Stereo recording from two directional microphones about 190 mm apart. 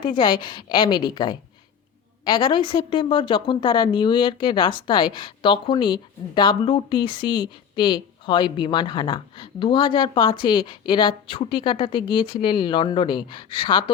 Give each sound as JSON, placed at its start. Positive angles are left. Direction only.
{"t": 0.0, "sound": "a woman's voice", "side_deg": 25}